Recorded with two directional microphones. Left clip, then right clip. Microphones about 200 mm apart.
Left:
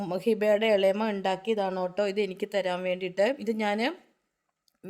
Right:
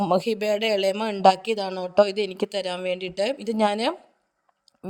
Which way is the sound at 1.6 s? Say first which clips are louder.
Even; 5° right (ahead or behind).